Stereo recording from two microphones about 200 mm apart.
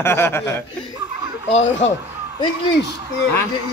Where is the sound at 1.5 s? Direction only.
35° left (ahead or behind).